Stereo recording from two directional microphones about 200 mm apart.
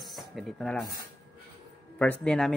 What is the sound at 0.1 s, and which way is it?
Speech, centre (ahead or behind).